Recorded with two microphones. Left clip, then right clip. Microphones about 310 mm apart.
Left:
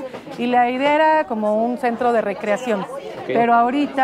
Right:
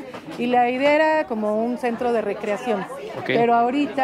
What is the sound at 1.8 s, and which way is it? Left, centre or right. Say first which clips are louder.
Speech: left 4 dB; left.